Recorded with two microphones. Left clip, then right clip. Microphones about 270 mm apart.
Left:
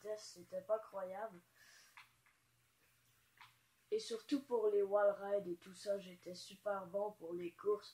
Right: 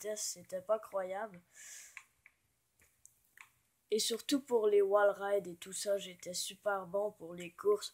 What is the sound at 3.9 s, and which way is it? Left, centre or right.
Speech, right.